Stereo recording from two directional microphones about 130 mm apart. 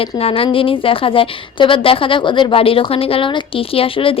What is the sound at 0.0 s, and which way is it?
A woman's voice, 45° left (ahead or behind).